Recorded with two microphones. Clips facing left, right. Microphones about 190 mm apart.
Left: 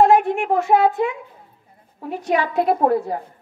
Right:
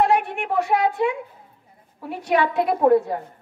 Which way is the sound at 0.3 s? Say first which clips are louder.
Left 5 dB; 40° left (ahead or behind).